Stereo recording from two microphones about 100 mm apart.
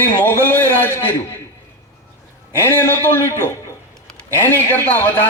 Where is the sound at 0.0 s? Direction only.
20° left (ahead or behind).